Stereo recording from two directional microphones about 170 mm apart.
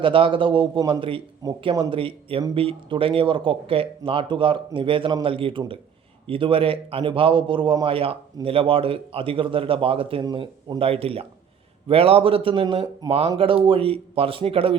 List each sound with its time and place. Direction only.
0.0 s a man's voice: 30° right (ahead or behind)